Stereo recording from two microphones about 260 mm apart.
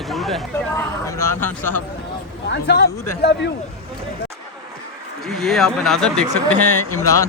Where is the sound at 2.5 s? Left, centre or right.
Left.